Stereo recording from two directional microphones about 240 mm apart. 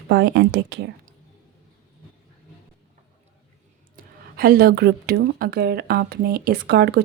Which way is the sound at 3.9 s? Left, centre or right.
Right.